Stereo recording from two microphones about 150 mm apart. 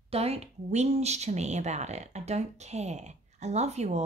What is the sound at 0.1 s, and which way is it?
A woman's voice, 45° right (ahead or behind).